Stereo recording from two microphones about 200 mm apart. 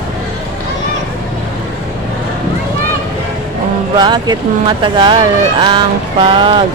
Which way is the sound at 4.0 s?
20° right (ahead or behind).